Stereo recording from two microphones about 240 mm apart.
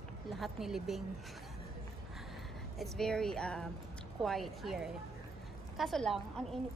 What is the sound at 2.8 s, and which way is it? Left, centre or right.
A woman's voice, centre.